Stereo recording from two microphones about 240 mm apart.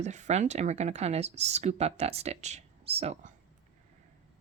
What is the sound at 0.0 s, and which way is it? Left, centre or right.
Speech, right.